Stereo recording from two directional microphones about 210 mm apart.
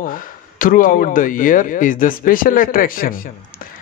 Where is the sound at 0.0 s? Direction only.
40° left (ahead or behind).